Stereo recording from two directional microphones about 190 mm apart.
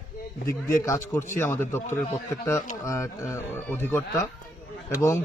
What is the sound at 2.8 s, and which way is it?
A man's voice, 15° left (ahead or behind).